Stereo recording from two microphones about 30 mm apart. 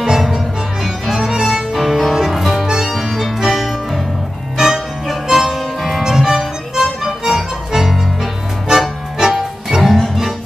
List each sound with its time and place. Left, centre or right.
0.0 s music: centre
1.7 s music: centre
2.6 s music: right
2.9 s music: centre
6.0 s music: centre
6.8 s music: centre
9.8 s music: centre